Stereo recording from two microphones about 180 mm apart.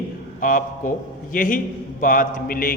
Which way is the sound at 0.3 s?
45° left (ahead or behind).